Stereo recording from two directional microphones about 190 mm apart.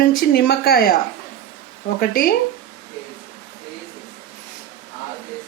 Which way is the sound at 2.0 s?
50° left (ahead or behind).